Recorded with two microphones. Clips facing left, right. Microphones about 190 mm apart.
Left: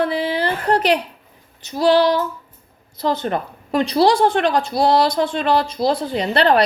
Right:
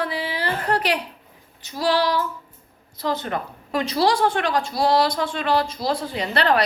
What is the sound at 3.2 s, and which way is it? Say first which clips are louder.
A woman's voice: left 5 dB; 30° left (ahead or behind).